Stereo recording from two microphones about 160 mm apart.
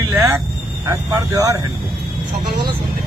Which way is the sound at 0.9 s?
20° right (ahead or behind).